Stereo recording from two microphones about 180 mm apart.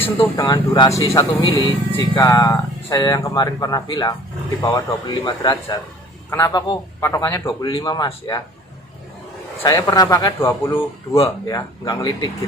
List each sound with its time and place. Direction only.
0.3 s a man's voice: 20° left (ahead or behind)
9.6 s speech: 20° left (ahead or behind)